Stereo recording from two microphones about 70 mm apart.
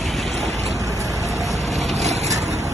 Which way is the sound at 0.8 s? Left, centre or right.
Right.